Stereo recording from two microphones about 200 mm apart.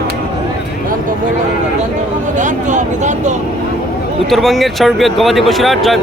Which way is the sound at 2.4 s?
40° right (ahead or behind).